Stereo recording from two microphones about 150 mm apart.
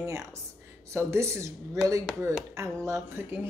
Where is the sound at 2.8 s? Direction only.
20° right (ahead or behind).